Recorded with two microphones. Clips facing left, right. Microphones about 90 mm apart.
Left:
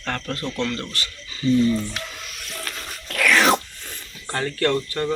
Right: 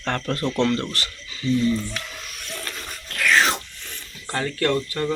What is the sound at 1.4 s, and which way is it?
Speech, 40° left (ahead or behind).